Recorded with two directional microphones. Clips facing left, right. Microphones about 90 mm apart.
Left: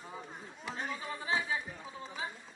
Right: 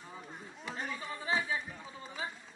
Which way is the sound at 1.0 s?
5° left (ahead or behind).